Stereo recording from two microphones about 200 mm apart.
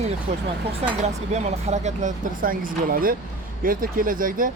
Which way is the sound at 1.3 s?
35° right (ahead or behind).